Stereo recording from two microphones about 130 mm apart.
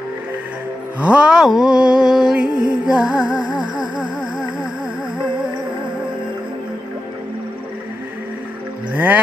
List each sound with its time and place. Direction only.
1.0 s music: 5° right (ahead or behind)
3.4 s music: 35° right (ahead or behind)
8.9 s music: 15° right (ahead or behind)